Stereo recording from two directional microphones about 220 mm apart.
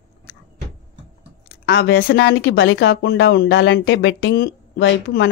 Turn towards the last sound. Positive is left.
turn(degrees=50)  # may be behind; listen again after turning